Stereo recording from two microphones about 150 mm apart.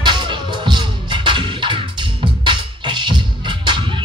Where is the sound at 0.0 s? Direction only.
30° right (ahead or behind).